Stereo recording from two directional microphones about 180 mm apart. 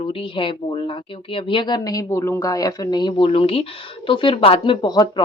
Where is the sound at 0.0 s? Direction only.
30° left (ahead or behind).